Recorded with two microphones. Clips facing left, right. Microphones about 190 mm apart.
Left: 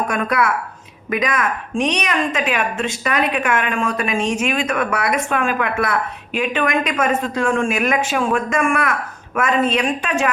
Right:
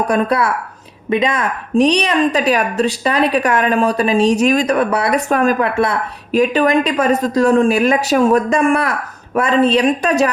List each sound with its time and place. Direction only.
0.1 s a woman's voice: 30° right (ahead or behind)